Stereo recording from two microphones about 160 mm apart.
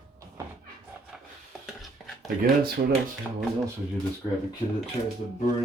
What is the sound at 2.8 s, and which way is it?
Speech, 55° right (ahead or behind).